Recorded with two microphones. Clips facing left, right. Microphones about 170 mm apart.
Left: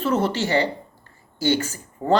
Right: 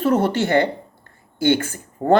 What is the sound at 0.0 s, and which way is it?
A woman's voice, 50° right (ahead or behind).